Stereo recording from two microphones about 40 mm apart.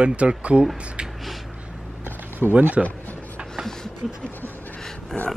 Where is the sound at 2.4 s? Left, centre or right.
Right.